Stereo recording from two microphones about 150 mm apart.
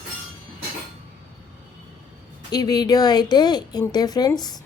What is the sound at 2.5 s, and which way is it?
A woman's voice, 25° left (ahead or behind).